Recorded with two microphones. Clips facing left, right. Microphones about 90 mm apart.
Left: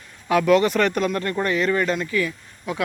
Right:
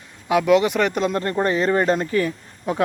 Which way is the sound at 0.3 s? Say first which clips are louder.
Right 1 dB; 15° right (ahead or behind).